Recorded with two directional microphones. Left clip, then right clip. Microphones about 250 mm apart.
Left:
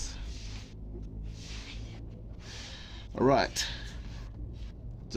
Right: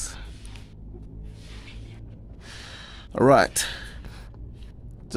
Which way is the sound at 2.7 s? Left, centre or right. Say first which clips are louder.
Right 8 dB; right.